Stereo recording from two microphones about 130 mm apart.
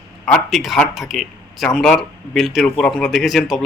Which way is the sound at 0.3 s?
Centre (ahead or behind).